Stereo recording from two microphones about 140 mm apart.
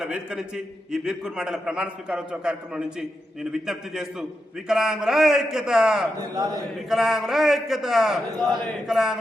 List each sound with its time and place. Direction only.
0.0 s a man's voice: 5° right (ahead or behind)
6.1 s a man's voice: 25° right (ahead or behind)
6.8 s a man's voice: centre (ahead or behind)